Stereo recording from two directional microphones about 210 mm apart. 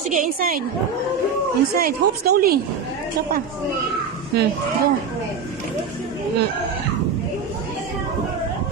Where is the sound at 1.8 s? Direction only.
50° right (ahead or behind).